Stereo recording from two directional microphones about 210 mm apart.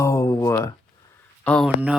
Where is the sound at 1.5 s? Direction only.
Centre (ahead or behind).